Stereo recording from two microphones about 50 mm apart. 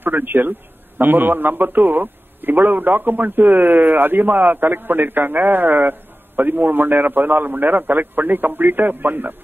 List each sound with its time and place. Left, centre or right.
0.0 s a man's voice: right